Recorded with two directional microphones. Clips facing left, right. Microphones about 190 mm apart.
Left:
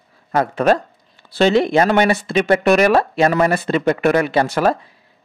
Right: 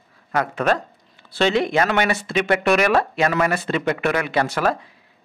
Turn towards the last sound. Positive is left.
turn(degrees=30)  # may be behind; listen again after turning